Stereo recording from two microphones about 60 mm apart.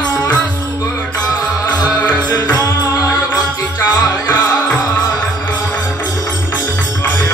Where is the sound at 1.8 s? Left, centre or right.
Left.